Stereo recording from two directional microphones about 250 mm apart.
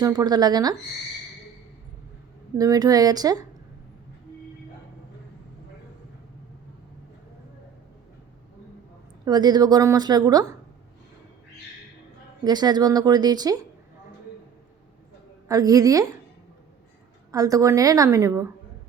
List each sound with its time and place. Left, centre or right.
0.0 s a woman's voice: centre
2.6 s a woman's voice: centre
9.2 s a woman's voice: centre
12.5 s a woman's voice: centre
15.4 s a woman's voice: centre
17.3 s a woman's voice: centre